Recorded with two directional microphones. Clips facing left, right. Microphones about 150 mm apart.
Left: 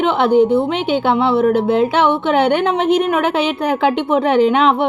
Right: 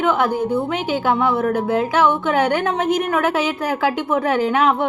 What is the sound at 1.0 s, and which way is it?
A woman's voice, 25° left (ahead or behind).